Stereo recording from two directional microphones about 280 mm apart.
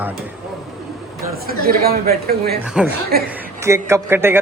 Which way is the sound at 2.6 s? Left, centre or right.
Centre.